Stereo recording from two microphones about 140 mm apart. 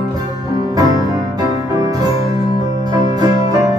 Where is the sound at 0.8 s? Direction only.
25° right (ahead or behind).